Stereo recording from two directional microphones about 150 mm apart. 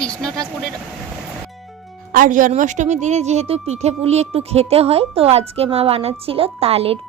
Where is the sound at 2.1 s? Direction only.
60° right (ahead or behind).